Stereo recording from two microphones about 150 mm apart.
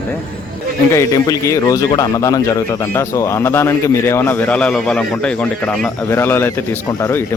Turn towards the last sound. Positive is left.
turn(degrees=15)  # may be behind; listen again after turning